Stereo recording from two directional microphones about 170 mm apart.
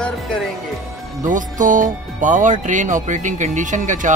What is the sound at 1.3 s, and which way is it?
Speech, 50° right (ahead or behind).